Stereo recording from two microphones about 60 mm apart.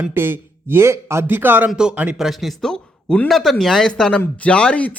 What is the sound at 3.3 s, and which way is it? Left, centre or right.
Speech, centre.